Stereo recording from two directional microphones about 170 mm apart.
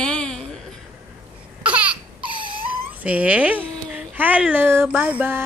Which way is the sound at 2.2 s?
30° right (ahead or behind).